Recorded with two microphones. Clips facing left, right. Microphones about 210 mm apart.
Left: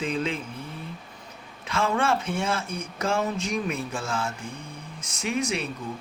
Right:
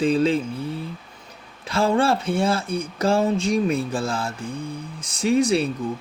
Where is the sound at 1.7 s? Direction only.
35° right (ahead or behind).